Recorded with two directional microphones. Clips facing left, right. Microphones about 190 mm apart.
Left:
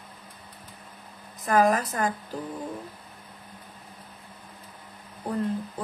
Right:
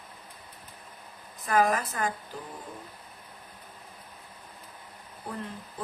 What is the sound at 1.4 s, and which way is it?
Speech, 40° left (ahead or behind).